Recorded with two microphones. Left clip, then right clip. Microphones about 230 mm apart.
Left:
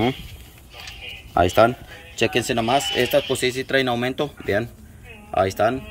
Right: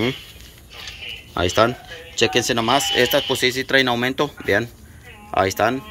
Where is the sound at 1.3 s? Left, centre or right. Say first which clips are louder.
Left 2 dB; centre.